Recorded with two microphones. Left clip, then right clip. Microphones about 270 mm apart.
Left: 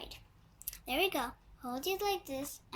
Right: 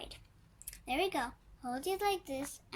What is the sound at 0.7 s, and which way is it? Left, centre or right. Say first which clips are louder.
A child's voice: left 1 dB; right.